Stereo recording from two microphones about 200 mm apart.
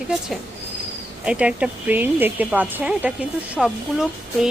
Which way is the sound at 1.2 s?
5° right (ahead or behind).